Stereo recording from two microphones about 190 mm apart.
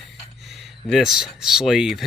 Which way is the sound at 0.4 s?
Centre (ahead or behind).